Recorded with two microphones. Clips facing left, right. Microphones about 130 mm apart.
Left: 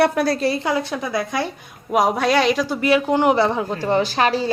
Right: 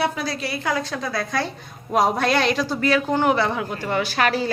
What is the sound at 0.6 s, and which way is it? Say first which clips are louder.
Speech: left 3 dB; 20° left (ahead or behind).